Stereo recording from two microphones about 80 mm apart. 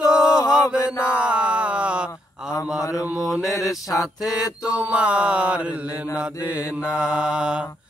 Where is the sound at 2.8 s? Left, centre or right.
Left.